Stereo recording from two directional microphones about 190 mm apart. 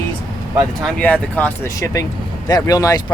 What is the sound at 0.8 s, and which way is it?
Speech, 5° left (ahead or behind).